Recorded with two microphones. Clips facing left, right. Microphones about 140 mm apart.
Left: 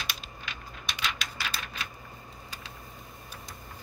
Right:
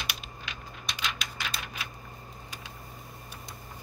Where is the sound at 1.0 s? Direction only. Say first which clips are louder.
Left 1 dB; centre (ahead or behind).